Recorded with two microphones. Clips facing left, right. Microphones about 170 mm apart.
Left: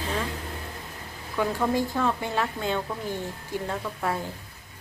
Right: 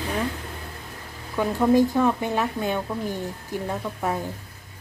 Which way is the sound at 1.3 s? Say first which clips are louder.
Right 6 dB; 20° right (ahead or behind).